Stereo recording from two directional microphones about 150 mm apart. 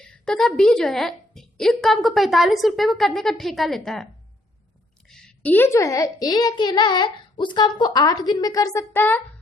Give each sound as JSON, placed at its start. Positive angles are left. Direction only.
{"t": 0.0, "sound": "a woman's voice", "side_deg": 5}